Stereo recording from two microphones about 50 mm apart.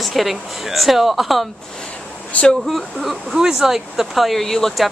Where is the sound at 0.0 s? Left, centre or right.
Centre.